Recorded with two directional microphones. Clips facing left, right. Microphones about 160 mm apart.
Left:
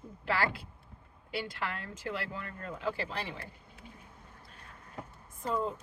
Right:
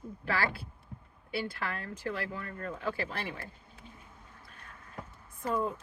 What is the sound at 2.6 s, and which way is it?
Speech, 15° left (ahead or behind).